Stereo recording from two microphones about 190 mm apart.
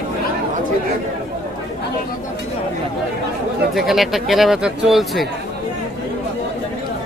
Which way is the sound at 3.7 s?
Centre (ahead or behind).